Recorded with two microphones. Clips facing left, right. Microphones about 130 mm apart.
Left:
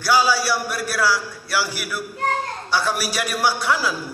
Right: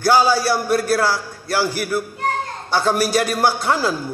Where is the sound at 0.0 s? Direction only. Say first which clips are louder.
Right 4 dB; 50° right (ahead or behind).